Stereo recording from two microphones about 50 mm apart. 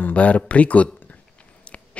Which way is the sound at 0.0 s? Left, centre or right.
Left.